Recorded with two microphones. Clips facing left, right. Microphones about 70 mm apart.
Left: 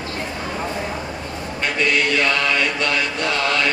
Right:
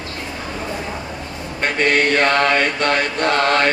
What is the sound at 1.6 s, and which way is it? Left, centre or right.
Mantra, right.